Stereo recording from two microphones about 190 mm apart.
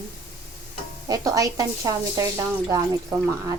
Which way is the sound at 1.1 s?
20° right (ahead or behind).